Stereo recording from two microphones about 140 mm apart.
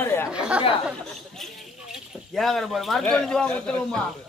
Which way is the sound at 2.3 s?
Centre (ahead or behind).